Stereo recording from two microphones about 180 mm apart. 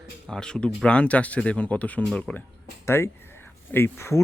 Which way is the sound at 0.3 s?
5° left (ahead or behind).